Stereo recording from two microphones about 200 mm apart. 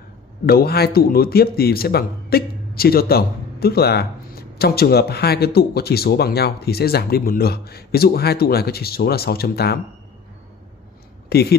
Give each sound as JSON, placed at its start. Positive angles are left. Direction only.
{"t": 0.5, "sound": "speech", "side_deg": 50}
{"t": 11.2, "sound": "speech", "side_deg": 55}